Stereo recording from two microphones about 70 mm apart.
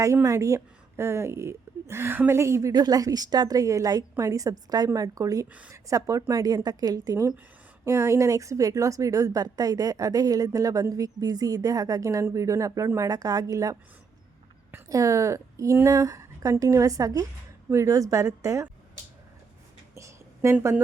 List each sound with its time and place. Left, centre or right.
0.0 s a woman's voice: right
2.7 s a woman's voice: right
14.8 s a woman's voice: right
20.0 s a sound: right